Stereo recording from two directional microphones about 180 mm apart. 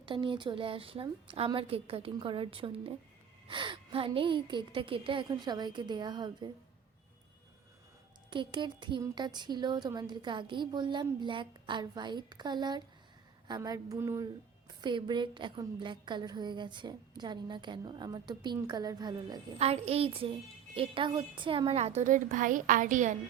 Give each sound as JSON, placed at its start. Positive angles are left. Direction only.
{"t": 0.0, "sound": "a woman's voice", "side_deg": -30}
{"t": 8.3, "sound": "a woman's voice", "side_deg": -25}
{"t": 19.5, "sound": "a woman's voice", "side_deg": -35}